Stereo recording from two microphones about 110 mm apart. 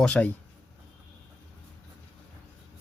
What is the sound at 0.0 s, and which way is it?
Speech, 10° left (ahead or behind).